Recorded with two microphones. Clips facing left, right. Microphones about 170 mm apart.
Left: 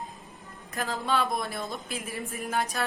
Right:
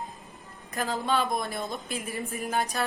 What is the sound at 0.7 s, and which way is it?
Speech, centre (ahead or behind).